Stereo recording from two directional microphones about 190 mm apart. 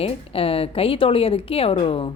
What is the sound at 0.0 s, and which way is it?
A woman's voice, 30° left (ahead or behind).